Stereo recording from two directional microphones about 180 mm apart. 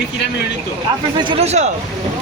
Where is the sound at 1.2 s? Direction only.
30° right (ahead or behind).